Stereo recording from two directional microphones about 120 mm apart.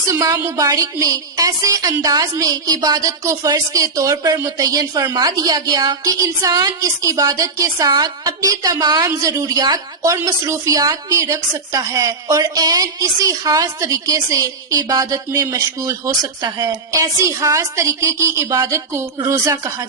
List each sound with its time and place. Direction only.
0.1 s a woman's voice: 25° right (ahead or behind)